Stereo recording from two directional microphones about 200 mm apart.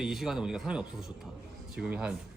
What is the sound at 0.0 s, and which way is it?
Speech, centre (ahead or behind).